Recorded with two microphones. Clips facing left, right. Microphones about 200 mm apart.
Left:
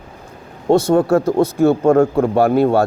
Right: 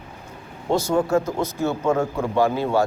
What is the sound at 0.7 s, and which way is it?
Speech, 65° left (ahead or behind).